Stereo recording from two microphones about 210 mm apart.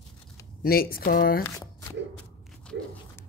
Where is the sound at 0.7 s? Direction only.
45° left (ahead or behind).